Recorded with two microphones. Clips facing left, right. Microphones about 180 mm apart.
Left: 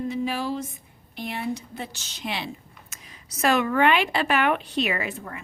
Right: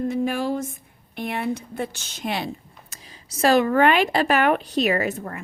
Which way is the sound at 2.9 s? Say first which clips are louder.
Right 3 dB; 30° right (ahead or behind).